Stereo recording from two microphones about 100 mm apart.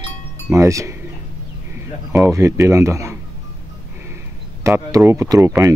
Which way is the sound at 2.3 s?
30° right (ahead or behind).